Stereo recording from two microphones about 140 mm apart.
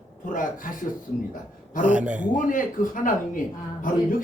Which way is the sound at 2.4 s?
70° left (ahead or behind).